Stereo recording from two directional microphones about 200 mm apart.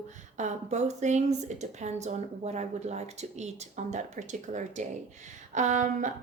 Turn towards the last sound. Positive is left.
turn(degrees=-40)  # may be behind; listen again after turning